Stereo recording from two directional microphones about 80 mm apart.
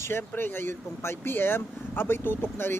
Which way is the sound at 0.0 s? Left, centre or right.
Left.